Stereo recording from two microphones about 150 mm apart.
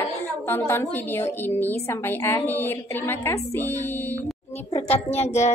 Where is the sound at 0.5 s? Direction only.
15° left (ahead or behind).